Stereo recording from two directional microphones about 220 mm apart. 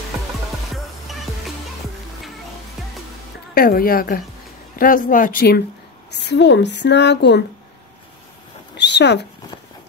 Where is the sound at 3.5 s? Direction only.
40° left (ahead or behind).